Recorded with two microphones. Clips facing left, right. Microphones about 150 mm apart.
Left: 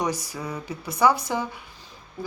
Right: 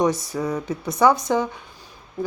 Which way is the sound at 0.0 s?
25° right (ahead or behind).